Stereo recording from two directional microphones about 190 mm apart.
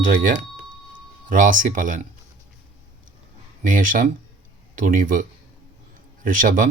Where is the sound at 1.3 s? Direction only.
45° right (ahead or behind).